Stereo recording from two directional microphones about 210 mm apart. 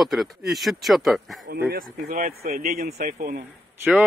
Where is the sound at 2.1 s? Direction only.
40° right (ahead or behind).